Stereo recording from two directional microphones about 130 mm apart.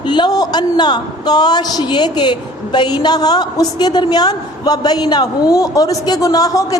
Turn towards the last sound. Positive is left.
turn(degrees=25)  # may be behind; listen again after turning